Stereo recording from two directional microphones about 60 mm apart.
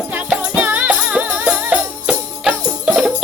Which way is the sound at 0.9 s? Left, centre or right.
Centre.